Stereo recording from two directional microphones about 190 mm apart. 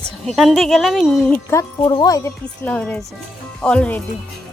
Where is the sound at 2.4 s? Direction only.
5° left (ahead or behind).